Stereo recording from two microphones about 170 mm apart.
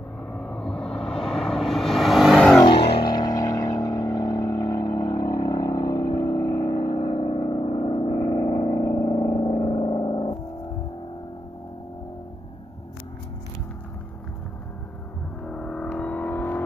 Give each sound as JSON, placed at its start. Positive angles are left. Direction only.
{"t": 0.3, "sound": "vehicle", "side_deg": 5}
{"t": 2.6, "sound": "a sound", "side_deg": 25}
{"t": 4.1, "sound": "vehicle", "side_deg": 20}
{"t": 15.4, "sound": "vehicle", "side_deg": 5}